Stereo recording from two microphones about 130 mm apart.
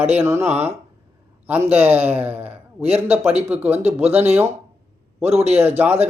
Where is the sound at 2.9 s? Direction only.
50° right (ahead or behind).